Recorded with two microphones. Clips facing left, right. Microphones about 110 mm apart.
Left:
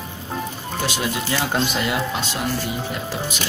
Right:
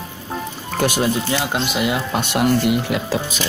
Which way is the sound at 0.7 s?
50° right (ahead or behind).